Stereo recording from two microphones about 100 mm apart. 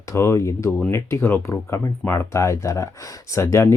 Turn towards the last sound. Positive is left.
turn(degrees=30)  # may be behind; listen again after turning